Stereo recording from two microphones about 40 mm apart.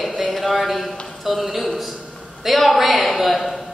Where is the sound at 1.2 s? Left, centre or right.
Centre.